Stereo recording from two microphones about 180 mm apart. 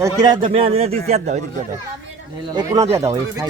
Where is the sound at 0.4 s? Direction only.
35° right (ahead or behind).